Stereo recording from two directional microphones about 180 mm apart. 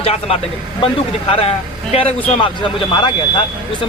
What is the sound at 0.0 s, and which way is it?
Speech, 35° left (ahead or behind).